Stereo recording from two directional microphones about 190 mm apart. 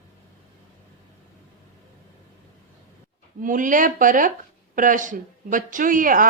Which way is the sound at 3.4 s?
45° right (ahead or behind).